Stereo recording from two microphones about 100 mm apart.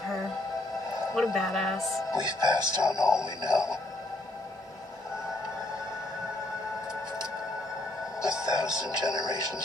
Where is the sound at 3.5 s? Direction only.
30° left (ahead or behind).